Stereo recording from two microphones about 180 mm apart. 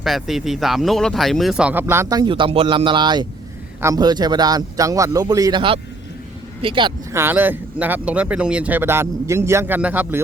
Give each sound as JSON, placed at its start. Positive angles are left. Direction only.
{"t": 0.0, "sound": "a man's voice", "side_deg": 0}
{"t": 7.1, "sound": "speech", "side_deg": -15}